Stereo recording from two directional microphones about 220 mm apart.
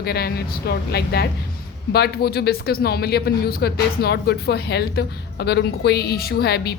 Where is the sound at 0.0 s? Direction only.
45° left (ahead or behind).